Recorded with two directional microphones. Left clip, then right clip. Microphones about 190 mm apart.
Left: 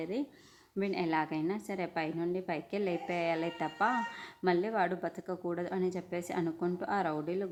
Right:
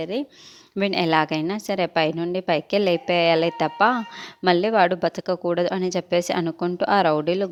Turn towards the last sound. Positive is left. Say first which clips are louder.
# right 14 dB
turn(degrees=-50)  # may be behind; listen again after turning